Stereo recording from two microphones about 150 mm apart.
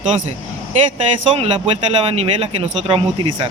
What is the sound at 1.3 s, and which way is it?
Speech, 40° right (ahead or behind).